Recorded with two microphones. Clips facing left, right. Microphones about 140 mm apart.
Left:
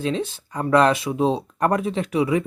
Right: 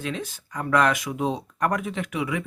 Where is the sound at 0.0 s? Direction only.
30° left (ahead or behind).